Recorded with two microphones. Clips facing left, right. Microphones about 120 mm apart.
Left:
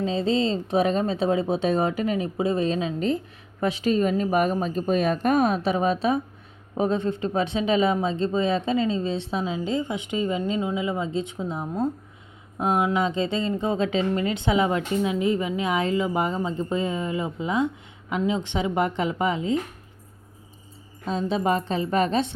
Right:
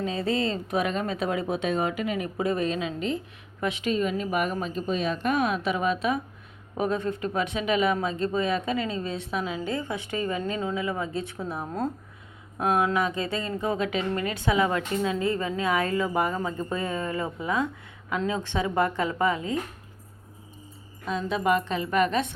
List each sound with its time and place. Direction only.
0.0 s a woman's voice: 25° left (ahead or behind)
21.0 s a woman's voice: 30° left (ahead or behind)